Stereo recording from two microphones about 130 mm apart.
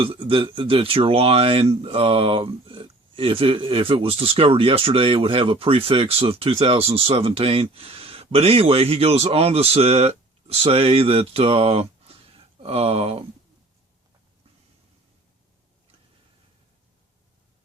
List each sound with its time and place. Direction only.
0.0 s speech: 45° right (ahead or behind)